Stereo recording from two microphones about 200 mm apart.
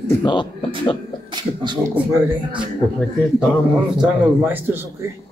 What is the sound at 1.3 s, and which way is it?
Speech, 20° right (ahead or behind).